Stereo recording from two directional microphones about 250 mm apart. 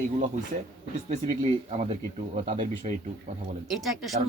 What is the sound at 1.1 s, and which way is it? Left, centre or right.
Speech, right.